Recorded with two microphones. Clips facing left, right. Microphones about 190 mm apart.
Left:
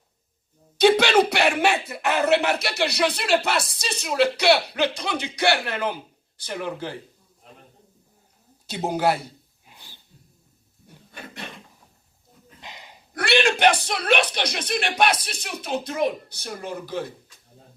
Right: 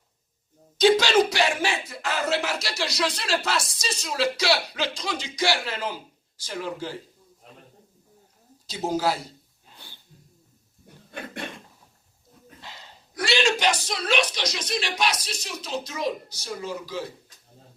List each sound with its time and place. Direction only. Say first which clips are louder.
0.8 s speech: left 2 dB; 60° left (ahead or behind)
8.9 s speech: left 3 dB; 60° left (ahead or behind)
9.7 s sneeze: right 1 dB; 15° left (ahead or behind)
11.1 s a sound: right 4 dB; 55° right (ahead or behind)
12.6 s a sound: left 3 dB; 15° left (ahead or behind)
13.1 s speech: left 3 dB; 60° left (ahead or behind)